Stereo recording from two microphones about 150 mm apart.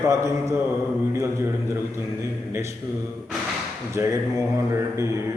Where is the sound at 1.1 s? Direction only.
20° right (ahead or behind).